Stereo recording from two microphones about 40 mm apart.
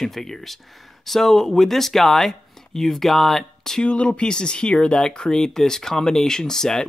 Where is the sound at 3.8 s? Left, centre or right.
Left; by 6.8 s centre.